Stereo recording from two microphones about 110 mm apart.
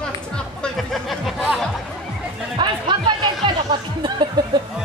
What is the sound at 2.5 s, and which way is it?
Chatter, 45° right (ahead or behind).